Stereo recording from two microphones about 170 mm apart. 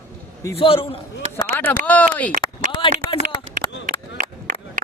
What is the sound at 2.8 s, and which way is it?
Speech, 30° left (ahead or behind).